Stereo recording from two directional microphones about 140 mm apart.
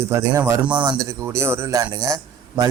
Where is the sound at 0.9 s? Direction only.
20° right (ahead or behind).